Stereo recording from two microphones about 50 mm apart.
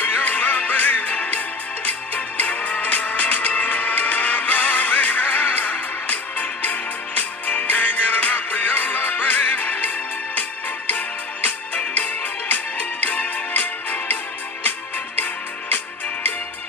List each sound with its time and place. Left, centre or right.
0.0 s music: left
10.9 s music: left